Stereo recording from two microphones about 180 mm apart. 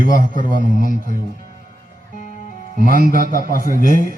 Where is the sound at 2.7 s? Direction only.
50° right (ahead or behind).